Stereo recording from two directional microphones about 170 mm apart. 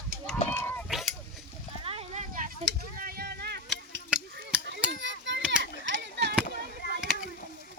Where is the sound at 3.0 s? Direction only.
60° right (ahead or behind).